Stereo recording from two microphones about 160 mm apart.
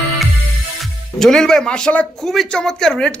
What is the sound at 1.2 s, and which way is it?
Speech, 5° left (ahead or behind).